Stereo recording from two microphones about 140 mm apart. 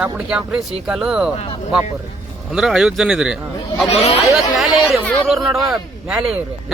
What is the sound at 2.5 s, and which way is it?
Speech, 5° right (ahead or behind).